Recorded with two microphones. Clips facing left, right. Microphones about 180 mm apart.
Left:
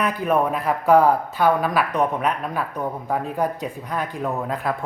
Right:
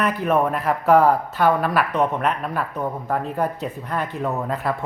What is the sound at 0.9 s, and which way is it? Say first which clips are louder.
Speech: even; 10° left (ahead or behind).